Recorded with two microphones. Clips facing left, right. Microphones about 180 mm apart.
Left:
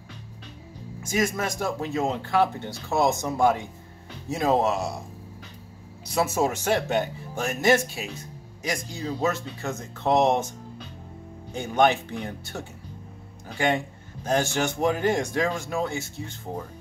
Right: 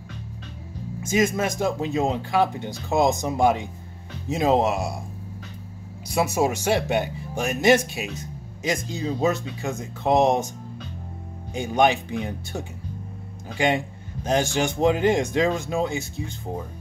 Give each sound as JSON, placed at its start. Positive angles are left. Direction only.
{"t": 1.0, "sound": "speech", "side_deg": -20}
{"t": 6.1, "sound": "speech", "side_deg": -10}
{"t": 11.5, "sound": "speech", "side_deg": -15}